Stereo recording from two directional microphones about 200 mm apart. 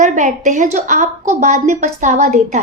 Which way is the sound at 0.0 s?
35° right (ahead or behind).